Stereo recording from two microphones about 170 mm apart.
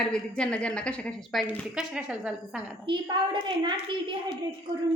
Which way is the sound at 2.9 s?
30° right (ahead or behind).